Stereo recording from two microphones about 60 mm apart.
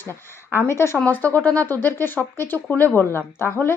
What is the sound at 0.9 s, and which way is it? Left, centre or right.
A woman's voice, left.